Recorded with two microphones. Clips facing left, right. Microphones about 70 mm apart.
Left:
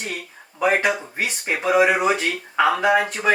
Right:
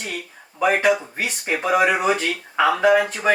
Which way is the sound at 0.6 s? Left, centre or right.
Centre.